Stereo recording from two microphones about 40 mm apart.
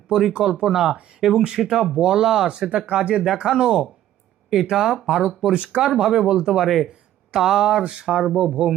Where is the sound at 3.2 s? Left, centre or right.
Centre.